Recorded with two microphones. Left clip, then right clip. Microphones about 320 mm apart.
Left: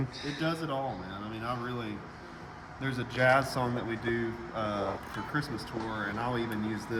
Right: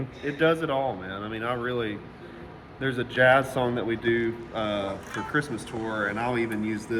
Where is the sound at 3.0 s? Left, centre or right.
Centre.